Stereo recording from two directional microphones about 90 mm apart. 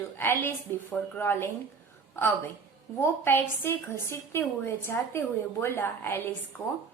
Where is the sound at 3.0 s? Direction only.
25° left (ahead or behind).